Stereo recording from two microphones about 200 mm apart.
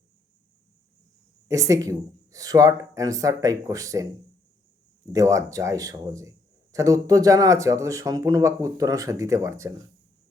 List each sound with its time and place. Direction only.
1.5 s speech: 15° right (ahead or behind)
5.1 s speech: 15° right (ahead or behind)